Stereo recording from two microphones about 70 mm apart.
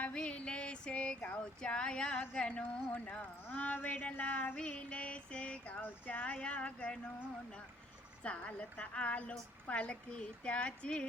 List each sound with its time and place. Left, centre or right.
0.0 s music: centre
1.4 s a woman's voice: centre
8.2 s a woman's voice: centre